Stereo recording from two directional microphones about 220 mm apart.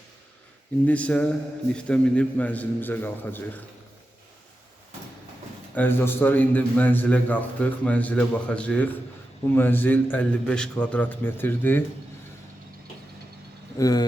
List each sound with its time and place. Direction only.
0.9 s a sound: 5° left (ahead or behind)
1.7 s a man's voice: 5° left (ahead or behind)
5.7 s a man's voice: 10° left (ahead or behind)
13.7 s a man's voice: 15° left (ahead or behind)